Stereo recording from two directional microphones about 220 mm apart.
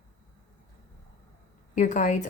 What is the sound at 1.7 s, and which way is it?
Speech, 35° left (ahead or behind).